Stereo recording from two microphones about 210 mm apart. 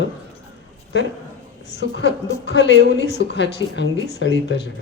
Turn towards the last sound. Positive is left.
turn(degrees=55)  # may be behind; listen again after turning